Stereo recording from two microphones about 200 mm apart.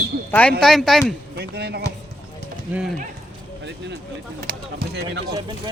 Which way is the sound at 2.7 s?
10° right (ahead or behind).